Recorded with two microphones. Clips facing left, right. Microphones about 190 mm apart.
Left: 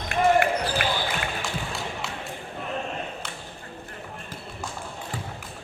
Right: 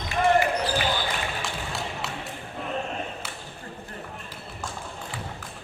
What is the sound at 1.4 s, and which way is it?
Music, centre (ahead or behind).